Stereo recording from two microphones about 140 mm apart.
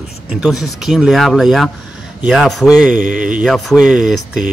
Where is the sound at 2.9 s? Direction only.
75° right (ahead or behind).